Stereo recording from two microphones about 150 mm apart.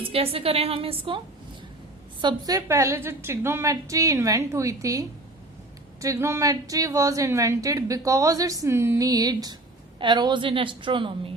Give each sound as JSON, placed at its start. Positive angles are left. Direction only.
{"t": 0.0, "sound": "a woman's voice", "side_deg": -40}
{"t": 2.2, "sound": "a woman's voice", "side_deg": -25}